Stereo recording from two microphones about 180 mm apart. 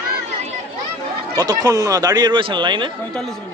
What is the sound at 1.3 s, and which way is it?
A man's voice, 20° right (ahead or behind).